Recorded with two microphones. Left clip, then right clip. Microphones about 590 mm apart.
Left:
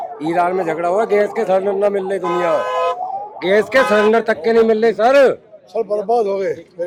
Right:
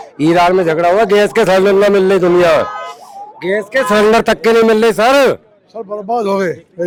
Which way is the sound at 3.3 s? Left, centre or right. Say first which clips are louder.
Left 1 dB; right.